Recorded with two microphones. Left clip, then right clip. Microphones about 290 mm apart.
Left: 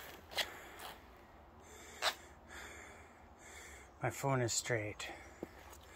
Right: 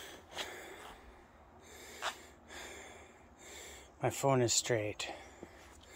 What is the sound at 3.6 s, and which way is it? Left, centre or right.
Speech, right.